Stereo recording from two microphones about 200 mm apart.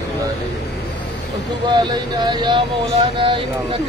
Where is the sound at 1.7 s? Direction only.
20° right (ahead or behind).